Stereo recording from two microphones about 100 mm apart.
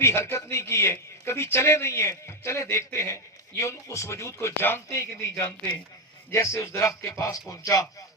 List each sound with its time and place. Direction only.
0.0 s a man's voice: 25° left (ahead or behind)